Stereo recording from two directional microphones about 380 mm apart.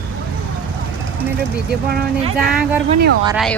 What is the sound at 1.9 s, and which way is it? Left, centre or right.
Speech, right.